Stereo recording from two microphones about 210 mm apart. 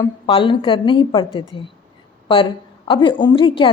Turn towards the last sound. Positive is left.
turn(degrees=25)  # may be behind; listen again after turning